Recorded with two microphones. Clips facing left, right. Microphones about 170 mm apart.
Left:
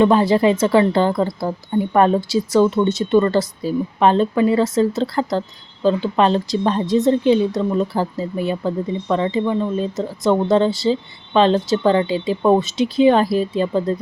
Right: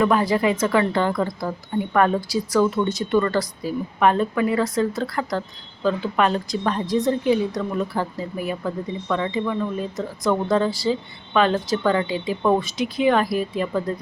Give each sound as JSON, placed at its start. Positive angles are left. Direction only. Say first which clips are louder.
{"t": 0.0, "sound": "a woman's voice", "louder": "left 5 dB", "side_deg": 25}